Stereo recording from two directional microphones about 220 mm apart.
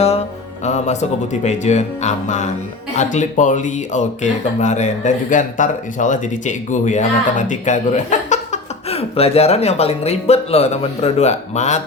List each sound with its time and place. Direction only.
0.0 s speech: 30° left (ahead or behind)